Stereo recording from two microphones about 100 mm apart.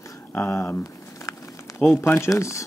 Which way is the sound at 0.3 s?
25° left (ahead or behind).